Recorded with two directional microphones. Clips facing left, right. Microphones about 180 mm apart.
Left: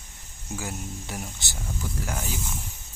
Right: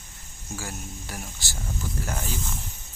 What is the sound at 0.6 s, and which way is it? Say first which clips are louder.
Speech: left 3 dB; 20° left (ahead or behind).